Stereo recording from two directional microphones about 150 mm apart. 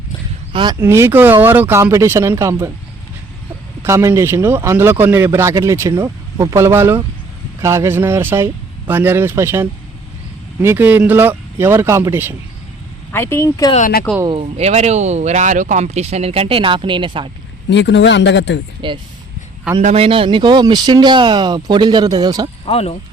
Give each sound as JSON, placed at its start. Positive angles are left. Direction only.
{"t": 0.5, "sound": "speech", "side_deg": -30}
{"t": 0.8, "sound": "a man's voice", "side_deg": -15}
{"t": 3.8, "sound": "a man's voice", "side_deg": -20}
{"t": 13.1, "sound": "speech", "side_deg": 15}
{"t": 13.7, "sound": "speech", "side_deg": 65}
{"t": 14.3, "sound": "speech", "side_deg": -45}
{"t": 18.8, "sound": "speech", "side_deg": -35}
{"t": 22.6, "sound": "speech", "side_deg": 45}